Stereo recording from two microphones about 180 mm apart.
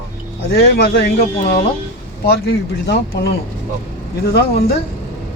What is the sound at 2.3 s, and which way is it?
Speech, 65° left (ahead or behind).